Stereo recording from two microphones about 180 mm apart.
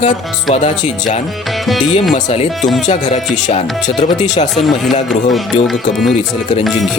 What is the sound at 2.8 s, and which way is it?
Speech, 40° left (ahead or behind).